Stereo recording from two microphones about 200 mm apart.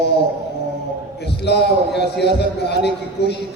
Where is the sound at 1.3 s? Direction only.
55° left (ahead or behind).